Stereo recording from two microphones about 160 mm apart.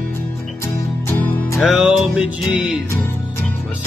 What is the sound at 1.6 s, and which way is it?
Music, centre (ahead or behind).